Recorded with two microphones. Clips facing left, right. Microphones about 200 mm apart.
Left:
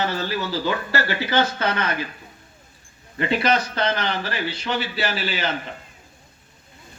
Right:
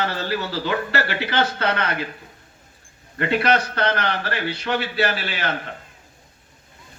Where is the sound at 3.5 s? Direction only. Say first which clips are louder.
Right 1 dB; 60° right (ahead or behind).